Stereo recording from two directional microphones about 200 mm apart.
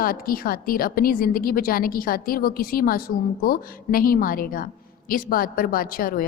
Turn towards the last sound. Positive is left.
turn(degrees=45)  # may be behind; listen again after turning